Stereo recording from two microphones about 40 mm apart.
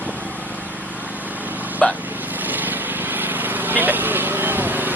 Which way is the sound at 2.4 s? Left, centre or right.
Right.